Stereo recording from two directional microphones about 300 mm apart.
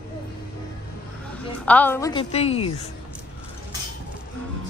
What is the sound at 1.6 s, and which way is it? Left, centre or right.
A woman's voice, centre.